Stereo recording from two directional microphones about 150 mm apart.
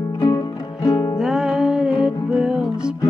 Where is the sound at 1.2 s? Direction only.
5° right (ahead or behind).